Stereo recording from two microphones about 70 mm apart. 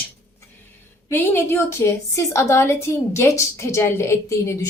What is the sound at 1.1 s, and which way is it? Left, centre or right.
A woman's voice, left.